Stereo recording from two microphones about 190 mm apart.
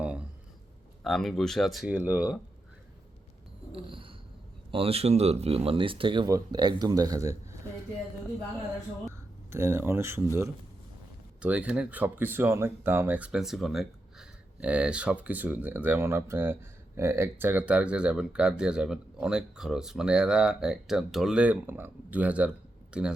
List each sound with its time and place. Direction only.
0.0 s a sound: 5° right (ahead or behind)
1.0 s speech: centre (ahead or behind)
3.7 s a sound: 30° right (ahead or behind)
4.7 s speech: 30° right (ahead or behind)
9.5 s speech: 15° right (ahead or behind)
11.3 s speech: 5° right (ahead or behind)